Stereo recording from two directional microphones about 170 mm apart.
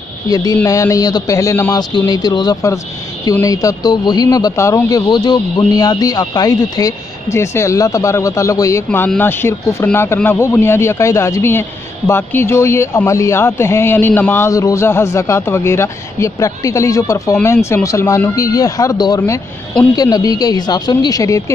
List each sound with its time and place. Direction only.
0.3 s a man's voice: 20° left (ahead or behind)